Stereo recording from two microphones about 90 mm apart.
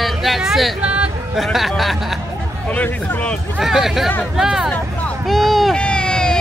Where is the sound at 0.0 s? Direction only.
Centre (ahead or behind).